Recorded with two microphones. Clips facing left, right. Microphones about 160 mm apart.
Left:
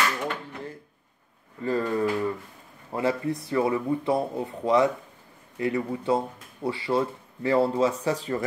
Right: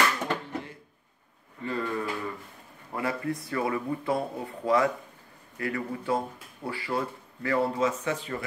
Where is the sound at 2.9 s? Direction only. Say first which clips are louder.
Left 4 dB; 25° left (ahead or behind).